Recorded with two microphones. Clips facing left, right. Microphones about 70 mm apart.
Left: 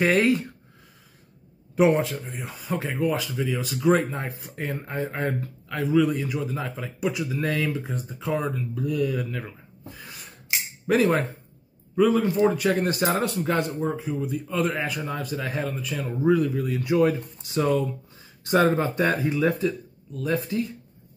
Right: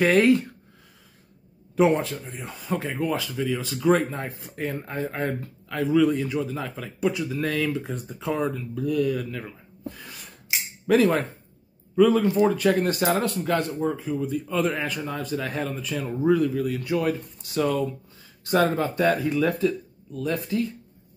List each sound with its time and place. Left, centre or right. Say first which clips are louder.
0.0 s speech: right 2 dB; centre
2.1 s speech: left 1 dB; centre
9.8 s a sound: right 4 dB; centre
10.9 s speech: right 1 dB; centre
11.9 s speech: right 2 dB; centre
13.2 s speech: even; centre
13.9 s speech: right 1 dB; centre
20.2 s speech: even; centre